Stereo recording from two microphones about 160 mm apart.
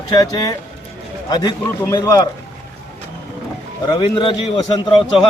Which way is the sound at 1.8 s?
20° left (ahead or behind).